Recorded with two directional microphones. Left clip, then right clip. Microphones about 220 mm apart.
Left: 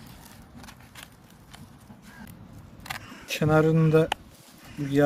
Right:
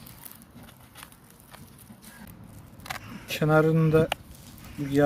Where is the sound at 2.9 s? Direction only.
5° left (ahead or behind).